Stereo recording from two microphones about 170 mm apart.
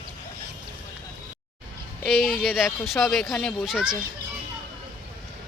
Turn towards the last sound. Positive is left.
turn(degrees=0)  # may be behind; listen again after turning